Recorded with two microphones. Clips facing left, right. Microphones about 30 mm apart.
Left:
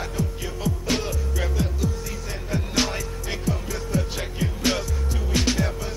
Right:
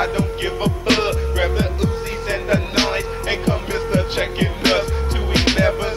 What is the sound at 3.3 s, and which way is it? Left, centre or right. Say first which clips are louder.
Music: right 7 dB; right.